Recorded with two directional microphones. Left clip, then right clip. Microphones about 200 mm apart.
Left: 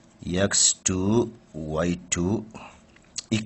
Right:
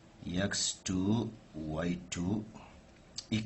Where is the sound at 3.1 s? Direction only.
55° left (ahead or behind).